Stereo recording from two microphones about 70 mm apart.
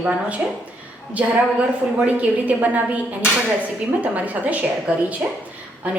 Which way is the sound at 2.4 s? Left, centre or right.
Right.